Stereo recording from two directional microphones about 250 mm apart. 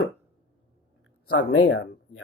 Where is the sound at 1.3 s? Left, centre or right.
Left.